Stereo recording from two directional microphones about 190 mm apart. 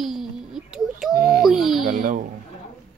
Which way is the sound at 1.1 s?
50° right (ahead or behind).